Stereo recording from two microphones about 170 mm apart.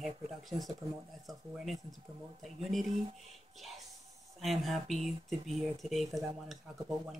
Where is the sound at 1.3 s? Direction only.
Centre (ahead or behind).